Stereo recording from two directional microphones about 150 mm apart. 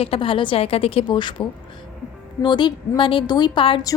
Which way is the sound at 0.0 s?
40° left (ahead or behind).